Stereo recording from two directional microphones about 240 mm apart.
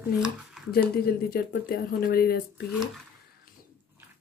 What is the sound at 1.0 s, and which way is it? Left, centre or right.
Speech, left.